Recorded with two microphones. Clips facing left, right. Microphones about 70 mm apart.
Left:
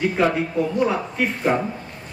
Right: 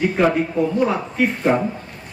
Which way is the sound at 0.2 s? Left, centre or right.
Centre.